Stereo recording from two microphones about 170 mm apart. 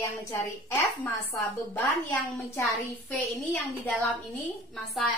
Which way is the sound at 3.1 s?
5° left (ahead or behind).